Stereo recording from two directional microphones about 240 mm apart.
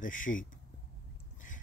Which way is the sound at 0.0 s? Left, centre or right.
Left.